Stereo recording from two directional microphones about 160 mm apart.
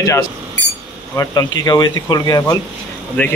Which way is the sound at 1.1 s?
20° left (ahead or behind).